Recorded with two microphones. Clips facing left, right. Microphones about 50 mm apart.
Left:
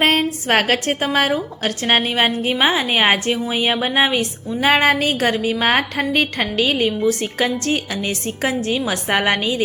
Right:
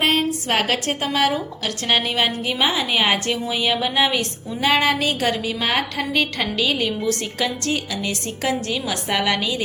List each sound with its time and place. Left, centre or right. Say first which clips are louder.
0.0 s a sound: left 3 dB; left
0.5 s a woman's voice: left 5 dB; left
0.9 s a woman's voice: left 2 dB; left
5.5 s a woman's voice: left 4 dB; left
7.0 s a woman's voice: left 5 dB; centre
7.3 s a woman's voice: left 4 dB; left
9.0 s a woman's voice: left 3 dB; left